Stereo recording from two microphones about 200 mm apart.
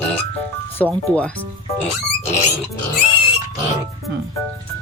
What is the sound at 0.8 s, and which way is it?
Speech, 5° left (ahead or behind).